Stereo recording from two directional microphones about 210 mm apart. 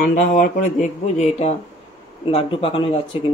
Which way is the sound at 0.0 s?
40° left (ahead or behind).